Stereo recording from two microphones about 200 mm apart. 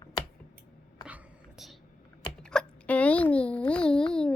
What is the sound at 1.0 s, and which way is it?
Whispering, 5° right (ahead or behind).